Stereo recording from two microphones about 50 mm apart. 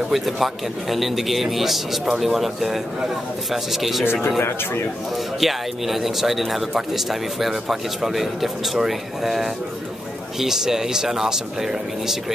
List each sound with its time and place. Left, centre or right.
0.1 s speech: centre
4.0 s speech: left
4.4 s speech: left
5.4 s speech: centre